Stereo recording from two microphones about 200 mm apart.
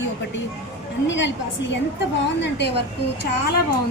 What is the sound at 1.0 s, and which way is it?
Speech, 65° left (ahead or behind).